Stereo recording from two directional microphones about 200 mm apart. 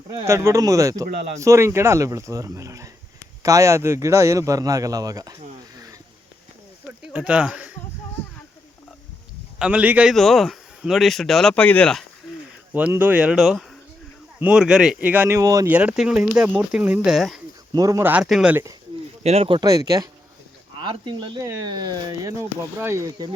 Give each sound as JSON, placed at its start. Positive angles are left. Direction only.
{"t": 0.3, "sound": "speech", "side_deg": -15}
{"t": 1.1, "sound": "speech", "side_deg": -30}
{"t": 1.4, "sound": "speech", "side_deg": -15}
{"t": 7.0, "sound": "speech", "side_deg": -5}
{"t": 9.6, "sound": "a man's voice", "side_deg": -5}
{"t": 12.2, "sound": "a sound", "side_deg": -5}
{"t": 12.7, "sound": "speech", "side_deg": -10}
{"t": 17.7, "sound": "speech", "side_deg": -15}
{"t": 19.2, "sound": "speech", "side_deg": -30}